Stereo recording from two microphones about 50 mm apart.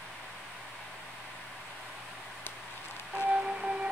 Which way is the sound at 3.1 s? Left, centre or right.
Right.